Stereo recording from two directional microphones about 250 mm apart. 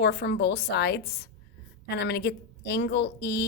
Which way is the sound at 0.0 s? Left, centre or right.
Left.